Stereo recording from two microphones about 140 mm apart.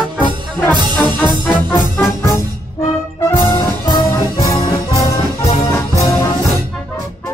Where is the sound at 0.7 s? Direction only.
30° right (ahead or behind).